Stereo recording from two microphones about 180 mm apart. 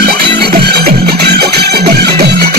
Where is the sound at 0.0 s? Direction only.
60° right (ahead or behind).